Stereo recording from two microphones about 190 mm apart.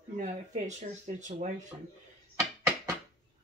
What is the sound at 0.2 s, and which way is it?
Speech, 40° right (ahead or behind).